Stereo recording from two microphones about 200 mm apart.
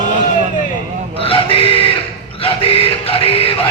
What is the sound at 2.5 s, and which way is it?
Music, 30° left (ahead or behind).